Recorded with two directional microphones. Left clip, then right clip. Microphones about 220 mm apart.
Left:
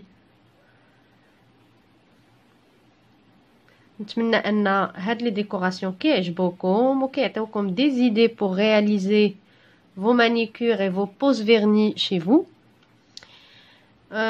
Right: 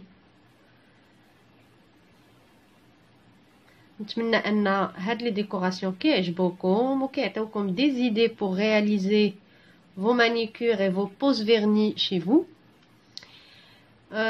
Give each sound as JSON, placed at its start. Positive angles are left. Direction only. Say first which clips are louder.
{"t": 4.0, "sound": "speech", "louder": "left 3 dB", "side_deg": 25}